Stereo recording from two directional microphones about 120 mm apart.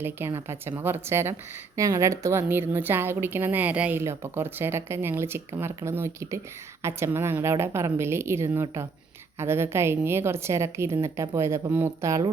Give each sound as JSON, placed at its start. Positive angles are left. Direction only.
{"t": 0.0, "sound": "a woman's voice", "side_deg": -20}